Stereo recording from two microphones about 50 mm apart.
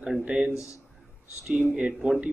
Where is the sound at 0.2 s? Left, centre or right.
Right.